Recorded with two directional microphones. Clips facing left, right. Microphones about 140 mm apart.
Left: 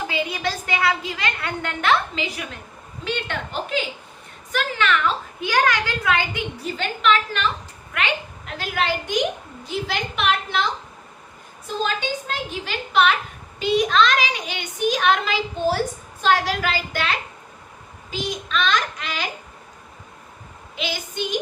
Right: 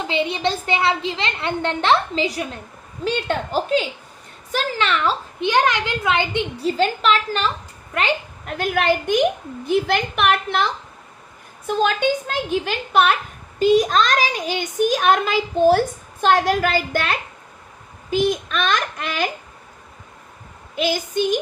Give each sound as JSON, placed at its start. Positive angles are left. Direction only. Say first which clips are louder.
{"t": 0.1, "sound": "a woman's voice", "louder": "right 4 dB", "side_deg": -25}
{"t": 8.4, "sound": "a child's voice", "louder": "right 5 dB", "side_deg": -55}
{"t": 20.7, "sound": "a child's voice", "louder": "right 7 dB", "side_deg": -45}